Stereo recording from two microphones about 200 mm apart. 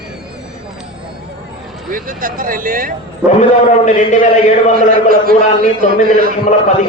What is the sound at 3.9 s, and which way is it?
Speech, 40° left (ahead or behind).